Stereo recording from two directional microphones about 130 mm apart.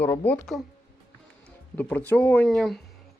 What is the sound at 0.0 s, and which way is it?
Speech, 15° left (ahead or behind).